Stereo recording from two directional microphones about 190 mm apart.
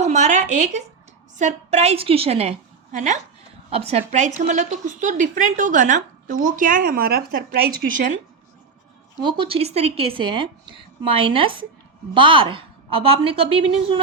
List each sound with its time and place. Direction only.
0.0 s a sound: 40° right (ahead or behind)
1.4 s a woman's voice: 40° right (ahead or behind)
9.2 s a woman's voice: 30° right (ahead or behind)